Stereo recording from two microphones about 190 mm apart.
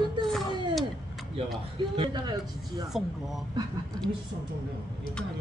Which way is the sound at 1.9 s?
25° right (ahead or behind).